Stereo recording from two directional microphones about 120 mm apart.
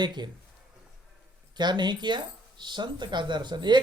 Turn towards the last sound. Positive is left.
turn(degrees=-40)  # may be behind; listen again after turning